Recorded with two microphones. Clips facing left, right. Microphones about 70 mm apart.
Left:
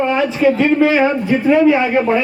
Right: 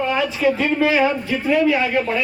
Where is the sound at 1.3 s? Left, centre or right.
Left.